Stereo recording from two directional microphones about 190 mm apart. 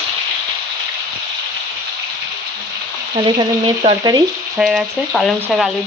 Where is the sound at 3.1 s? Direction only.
25° right (ahead or behind).